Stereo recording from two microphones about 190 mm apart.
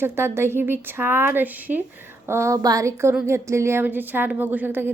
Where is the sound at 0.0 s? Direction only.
15° right (ahead or behind).